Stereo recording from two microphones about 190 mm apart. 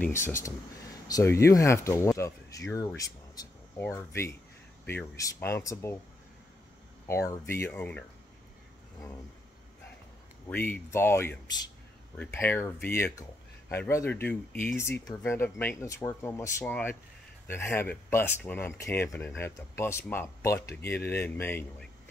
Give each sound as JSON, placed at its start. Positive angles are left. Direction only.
{"t": 0.0, "sound": "speech", "side_deg": 15}
{"t": 7.1, "sound": "speech", "side_deg": 15}
{"t": 10.5, "sound": "speech", "side_deg": 10}